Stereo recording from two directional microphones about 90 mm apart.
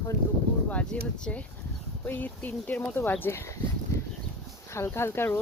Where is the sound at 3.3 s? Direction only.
35° left (ahead or behind).